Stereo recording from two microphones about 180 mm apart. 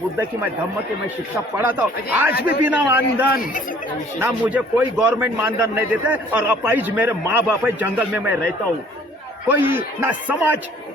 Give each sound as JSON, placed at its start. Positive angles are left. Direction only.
{"t": 1.5, "sound": "a man's voice", "side_deg": -10}
{"t": 2.3, "sound": "a man's voice", "side_deg": 60}
{"t": 2.6, "sound": "a man's voice", "side_deg": -10}
{"t": 9.5, "sound": "a man's voice", "side_deg": -10}